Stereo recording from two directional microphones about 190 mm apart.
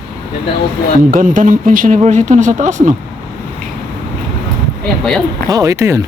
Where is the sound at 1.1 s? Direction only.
45° right (ahead or behind).